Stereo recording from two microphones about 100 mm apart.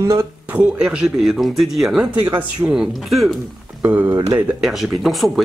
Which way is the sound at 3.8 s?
20° right (ahead or behind).